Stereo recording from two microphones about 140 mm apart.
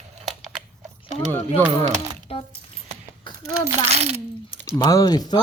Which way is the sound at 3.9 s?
50° right (ahead or behind).